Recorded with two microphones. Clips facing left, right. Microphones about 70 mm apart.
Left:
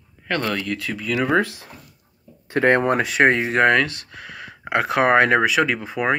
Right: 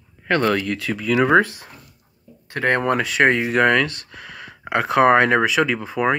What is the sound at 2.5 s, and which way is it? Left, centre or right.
Speech, centre.